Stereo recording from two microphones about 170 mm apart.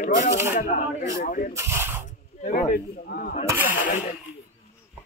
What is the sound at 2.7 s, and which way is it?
Speech, 60° left (ahead or behind).